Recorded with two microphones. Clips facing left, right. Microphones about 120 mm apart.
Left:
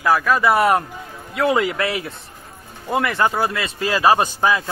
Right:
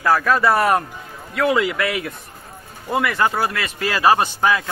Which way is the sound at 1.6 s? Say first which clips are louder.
Even; 35° left (ahead or behind).